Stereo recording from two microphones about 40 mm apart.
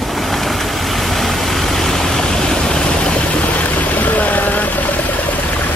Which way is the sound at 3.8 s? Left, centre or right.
Left.